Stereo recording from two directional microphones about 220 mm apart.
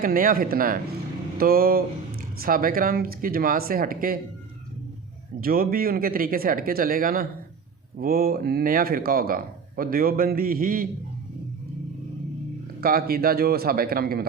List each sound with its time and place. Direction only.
0.0 s speech: 40° right (ahead or behind)
5.4 s speech: 40° right (ahead or behind)
12.8 s a man's voice: 40° right (ahead or behind)